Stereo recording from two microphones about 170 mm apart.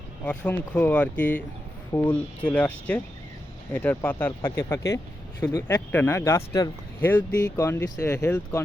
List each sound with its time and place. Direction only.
0.3 s speech: 10° left (ahead or behind)